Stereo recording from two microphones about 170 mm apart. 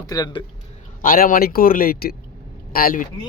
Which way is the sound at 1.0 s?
55° left (ahead or behind).